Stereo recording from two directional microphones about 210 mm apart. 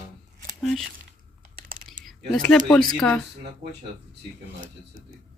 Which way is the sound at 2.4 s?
5° left (ahead or behind).